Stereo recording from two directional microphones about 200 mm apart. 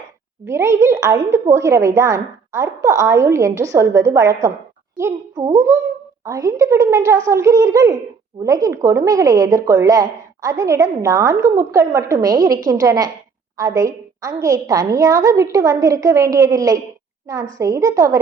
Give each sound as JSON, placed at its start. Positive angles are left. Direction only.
{"t": 0.4, "sound": "a woman's voice", "side_deg": -15}